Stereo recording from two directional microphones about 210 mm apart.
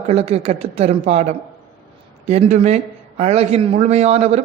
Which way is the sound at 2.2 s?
30° right (ahead or behind).